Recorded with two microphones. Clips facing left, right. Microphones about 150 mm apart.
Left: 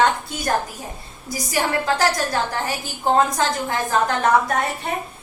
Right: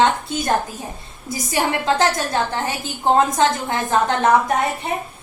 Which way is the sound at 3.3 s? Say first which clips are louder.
Right 4 dB; 20° right (ahead or behind).